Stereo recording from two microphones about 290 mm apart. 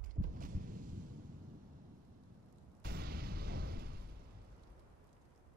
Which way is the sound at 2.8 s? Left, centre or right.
Right.